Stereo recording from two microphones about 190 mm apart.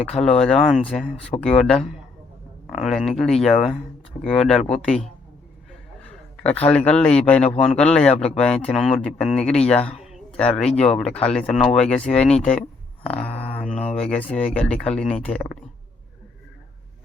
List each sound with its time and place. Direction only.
0.0 s speech: 5° left (ahead or behind)
6.0 s a sound: 5° left (ahead or behind)
6.7 s speech: 5° left (ahead or behind)
13.4 s mantra: 5° left (ahead or behind)
14.0 s speech: 5° left (ahead or behind)